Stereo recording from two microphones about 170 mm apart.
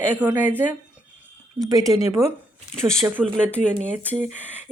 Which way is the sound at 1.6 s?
20° right (ahead or behind).